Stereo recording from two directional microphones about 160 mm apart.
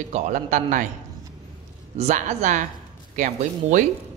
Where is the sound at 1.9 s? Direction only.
45° right (ahead or behind).